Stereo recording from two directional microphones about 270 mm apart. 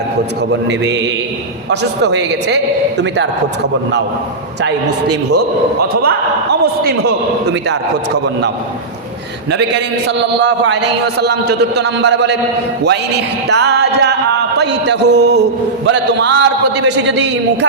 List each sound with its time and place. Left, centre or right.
1.7 s a man's voice: right
6.0 s a man's voice: right
9.5 s a man's voice: right